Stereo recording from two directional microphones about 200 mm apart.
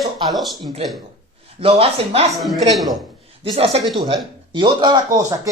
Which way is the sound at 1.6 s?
30° right (ahead or behind).